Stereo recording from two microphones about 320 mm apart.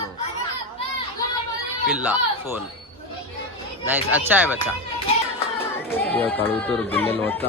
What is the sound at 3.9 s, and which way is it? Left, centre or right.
Speech, centre.